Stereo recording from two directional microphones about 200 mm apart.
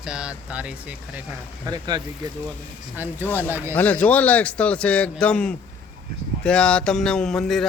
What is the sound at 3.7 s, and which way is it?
A man's voice, 10° left (ahead or behind).